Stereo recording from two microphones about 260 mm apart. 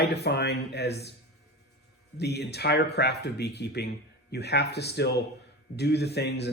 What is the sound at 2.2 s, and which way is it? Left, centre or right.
Speech, left.